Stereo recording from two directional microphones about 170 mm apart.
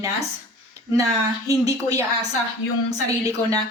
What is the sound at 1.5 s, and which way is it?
A woman's voice, 20° right (ahead or behind).